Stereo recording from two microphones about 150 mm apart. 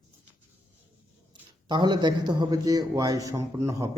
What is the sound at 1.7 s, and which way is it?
A man's voice, 30° right (ahead or behind).